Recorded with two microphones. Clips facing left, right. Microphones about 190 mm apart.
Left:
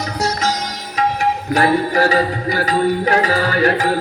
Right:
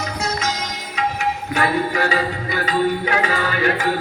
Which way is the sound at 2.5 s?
40° left (ahead or behind).